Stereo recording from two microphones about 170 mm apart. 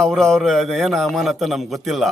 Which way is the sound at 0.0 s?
5° left (ahead or behind).